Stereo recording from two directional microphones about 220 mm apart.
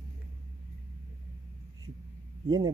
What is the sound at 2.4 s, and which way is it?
Speech, 20° right (ahead or behind).